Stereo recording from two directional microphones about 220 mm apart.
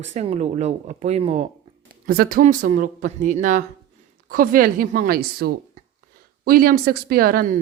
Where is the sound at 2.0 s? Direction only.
45° right (ahead or behind).